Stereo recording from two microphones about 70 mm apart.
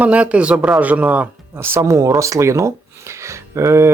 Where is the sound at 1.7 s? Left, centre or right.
Right.